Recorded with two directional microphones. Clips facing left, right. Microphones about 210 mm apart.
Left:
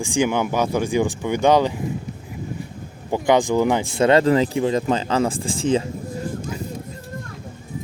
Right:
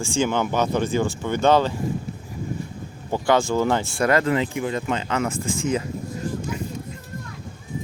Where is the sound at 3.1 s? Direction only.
15° left (ahead or behind).